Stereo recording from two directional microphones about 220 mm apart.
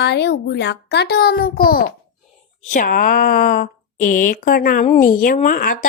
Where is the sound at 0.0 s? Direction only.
50° left (ahead or behind).